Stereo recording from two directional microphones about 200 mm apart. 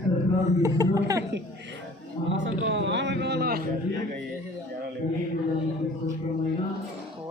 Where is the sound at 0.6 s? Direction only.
15° right (ahead or behind).